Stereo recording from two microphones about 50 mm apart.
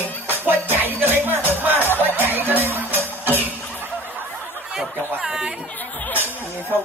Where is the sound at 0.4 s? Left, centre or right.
Right.